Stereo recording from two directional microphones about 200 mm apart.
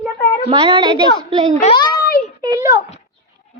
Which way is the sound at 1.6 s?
25° left (ahead or behind).